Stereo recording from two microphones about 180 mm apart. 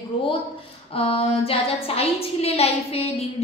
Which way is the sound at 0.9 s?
30° left (ahead or behind).